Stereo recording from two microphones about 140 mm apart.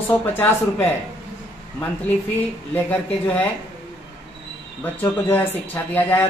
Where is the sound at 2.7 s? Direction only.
10° left (ahead or behind).